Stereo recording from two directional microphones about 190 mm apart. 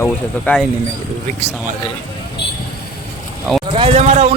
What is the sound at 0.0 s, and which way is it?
Speech, 5° left (ahead or behind).